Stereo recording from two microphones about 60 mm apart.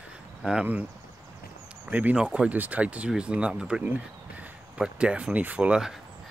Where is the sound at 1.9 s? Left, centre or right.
Right.